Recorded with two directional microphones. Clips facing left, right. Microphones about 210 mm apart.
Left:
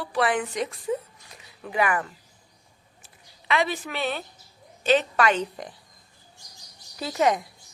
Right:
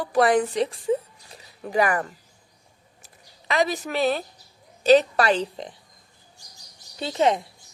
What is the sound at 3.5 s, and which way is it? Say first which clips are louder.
A woman's voice: right 2 dB; 40° right (ahead or behind).